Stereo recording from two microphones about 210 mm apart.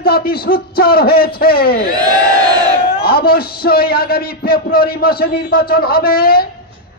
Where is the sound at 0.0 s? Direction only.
45° left (ahead or behind).